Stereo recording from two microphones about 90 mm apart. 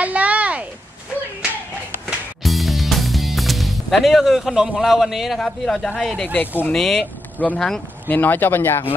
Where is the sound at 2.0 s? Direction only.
Centre (ahead or behind).